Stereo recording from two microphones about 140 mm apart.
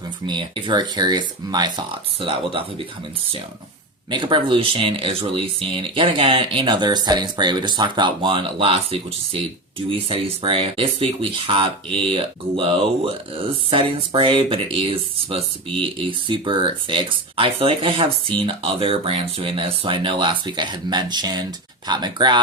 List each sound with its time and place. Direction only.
0.3 s speech: 35° right (ahead or behind)
4.1 s speech: 35° right (ahead or behind)